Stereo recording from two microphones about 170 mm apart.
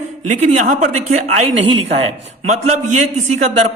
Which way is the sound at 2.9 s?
45° right (ahead or behind).